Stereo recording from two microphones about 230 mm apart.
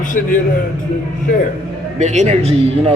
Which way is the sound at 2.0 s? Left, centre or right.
Right.